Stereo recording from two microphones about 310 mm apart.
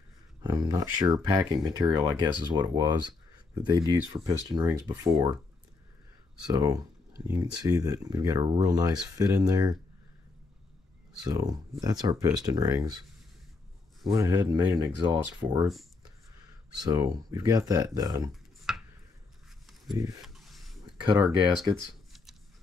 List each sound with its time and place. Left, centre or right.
0.4 s speech: centre
6.5 s speech: centre
11.2 s speech: centre
14.1 s speech: centre
16.8 s speech: centre
18.7 s a sound: centre
20.2 s a sound: centre
21.0 s speech: centre